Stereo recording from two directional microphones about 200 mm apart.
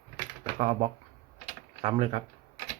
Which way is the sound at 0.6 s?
35° right (ahead or behind).